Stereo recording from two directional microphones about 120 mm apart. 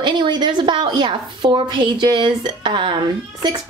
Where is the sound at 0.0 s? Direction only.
40° right (ahead or behind).